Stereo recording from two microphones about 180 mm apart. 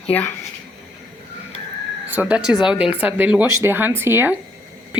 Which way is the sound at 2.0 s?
10° right (ahead or behind).